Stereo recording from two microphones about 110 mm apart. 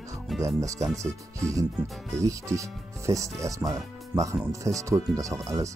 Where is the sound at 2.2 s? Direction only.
30° right (ahead or behind).